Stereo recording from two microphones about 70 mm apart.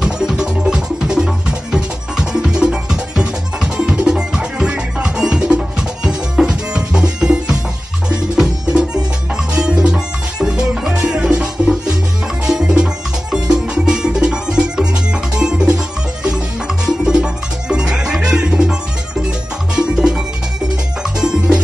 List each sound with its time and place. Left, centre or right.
0.0 s music: centre
16.8 s music: centre
21.2 s music: centre